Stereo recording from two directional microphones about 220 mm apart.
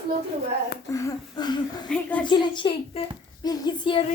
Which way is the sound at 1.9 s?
5° left (ahead or behind).